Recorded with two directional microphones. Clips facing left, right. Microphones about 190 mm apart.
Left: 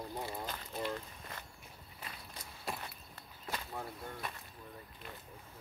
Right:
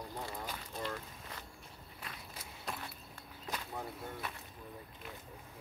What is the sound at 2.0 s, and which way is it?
Walk, 5° left (ahead or behind).